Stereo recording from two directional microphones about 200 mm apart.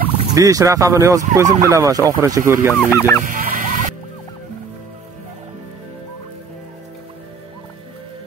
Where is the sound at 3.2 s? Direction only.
45° right (ahead or behind).